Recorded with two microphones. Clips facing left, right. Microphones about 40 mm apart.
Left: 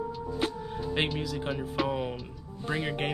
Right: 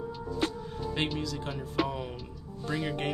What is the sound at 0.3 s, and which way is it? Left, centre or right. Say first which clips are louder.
Music: right 1 dB; centre.